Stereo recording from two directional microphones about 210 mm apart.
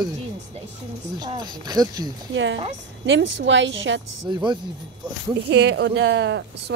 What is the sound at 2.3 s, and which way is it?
A woman's voice, 60° right (ahead or behind).